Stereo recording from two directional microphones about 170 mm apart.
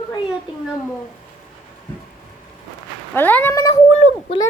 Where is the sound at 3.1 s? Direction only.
10° left (ahead or behind).